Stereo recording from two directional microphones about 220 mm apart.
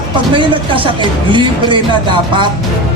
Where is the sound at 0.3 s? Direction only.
20° right (ahead or behind).